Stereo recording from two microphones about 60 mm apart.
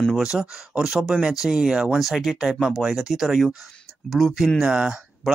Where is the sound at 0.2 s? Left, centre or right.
Centre.